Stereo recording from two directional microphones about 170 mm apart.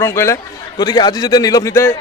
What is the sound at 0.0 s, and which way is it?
A man's voice, 15° left (ahead or behind).